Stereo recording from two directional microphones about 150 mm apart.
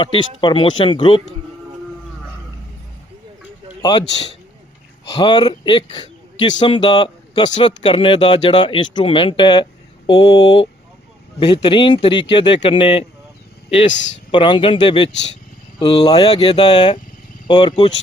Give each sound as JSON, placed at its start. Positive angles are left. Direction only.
{"t": 0.0, "sound": "speech", "side_deg": 35}
{"t": 5.0, "sound": "speech", "side_deg": 25}
{"t": 14.3, "sound": "speech", "side_deg": 30}